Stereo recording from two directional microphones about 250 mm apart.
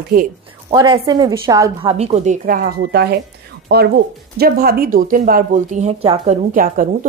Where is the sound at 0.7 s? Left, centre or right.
Centre.